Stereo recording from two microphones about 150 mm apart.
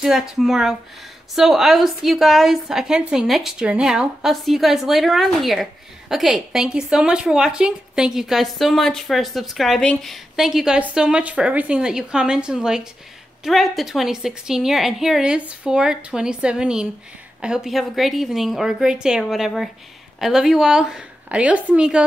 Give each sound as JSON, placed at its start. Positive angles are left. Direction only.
{"t": 0.0, "sound": "a woman's voice", "side_deg": 0}